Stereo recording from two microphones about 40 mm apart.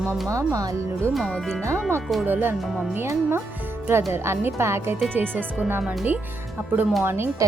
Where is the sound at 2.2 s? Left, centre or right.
Right.